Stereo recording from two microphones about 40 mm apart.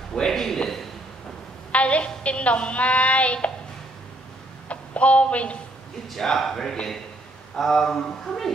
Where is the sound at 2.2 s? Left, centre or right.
Left.